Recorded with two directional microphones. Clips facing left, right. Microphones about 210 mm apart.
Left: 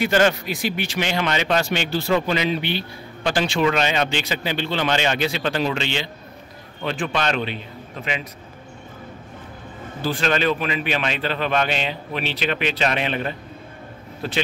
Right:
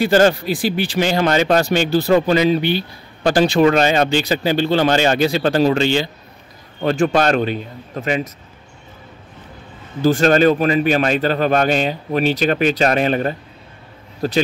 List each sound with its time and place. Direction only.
0.0 s a man's voice: 35° right (ahead or behind)
10.0 s a man's voice: 45° right (ahead or behind)